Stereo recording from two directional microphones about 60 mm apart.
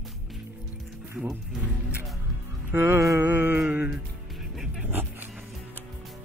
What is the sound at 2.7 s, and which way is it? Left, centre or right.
Music, right.